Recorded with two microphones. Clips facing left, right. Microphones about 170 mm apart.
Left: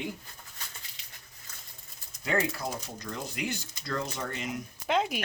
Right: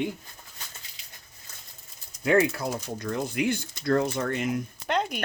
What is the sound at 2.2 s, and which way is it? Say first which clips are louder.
Speech: right 7 dB; 60° right (ahead or behind).